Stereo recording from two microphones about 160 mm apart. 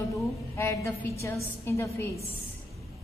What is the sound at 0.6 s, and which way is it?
A woman's voice, 15° left (ahead or behind).